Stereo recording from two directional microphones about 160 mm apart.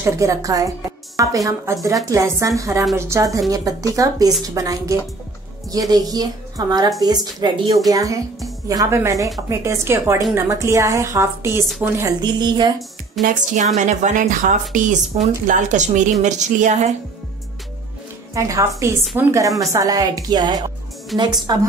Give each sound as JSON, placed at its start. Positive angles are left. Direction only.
{"t": 0.0, "sound": "a woman's voice", "side_deg": -20}
{"t": 13.2, "sound": "speech", "side_deg": -50}
{"t": 18.3, "sound": "a woman's voice", "side_deg": -20}
{"t": 21.1, "sound": "a woman's voice", "side_deg": 0}
{"t": 21.5, "sound": "a woman's voice", "side_deg": -25}